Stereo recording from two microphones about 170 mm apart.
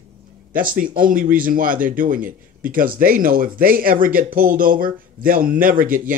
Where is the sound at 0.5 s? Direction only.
55° right (ahead or behind).